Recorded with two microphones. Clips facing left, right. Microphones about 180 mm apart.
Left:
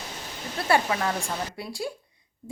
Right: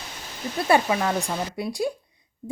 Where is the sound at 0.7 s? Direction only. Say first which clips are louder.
Right 2 dB; 20° right (ahead or behind).